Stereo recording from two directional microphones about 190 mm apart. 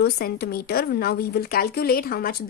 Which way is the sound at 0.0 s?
55° left (ahead or behind).